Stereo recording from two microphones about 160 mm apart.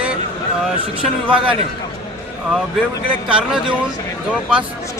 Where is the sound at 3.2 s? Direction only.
5° right (ahead or behind).